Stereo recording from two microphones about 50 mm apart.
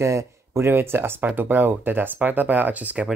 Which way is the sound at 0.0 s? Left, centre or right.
Right.